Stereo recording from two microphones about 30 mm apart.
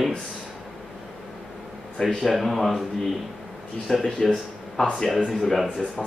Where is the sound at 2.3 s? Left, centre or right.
Centre.